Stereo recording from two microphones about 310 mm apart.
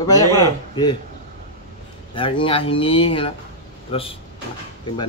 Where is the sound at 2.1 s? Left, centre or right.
Centre.